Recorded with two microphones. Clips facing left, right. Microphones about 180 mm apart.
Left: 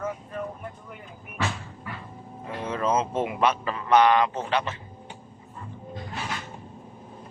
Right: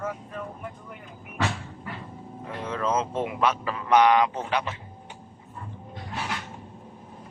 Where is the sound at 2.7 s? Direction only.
10° left (ahead or behind); by 4.7 s 15° right (ahead or behind).